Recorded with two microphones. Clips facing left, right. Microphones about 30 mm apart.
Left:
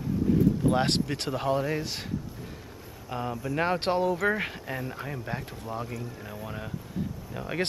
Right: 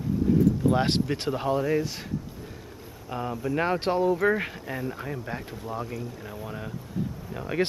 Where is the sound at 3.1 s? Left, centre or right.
Centre.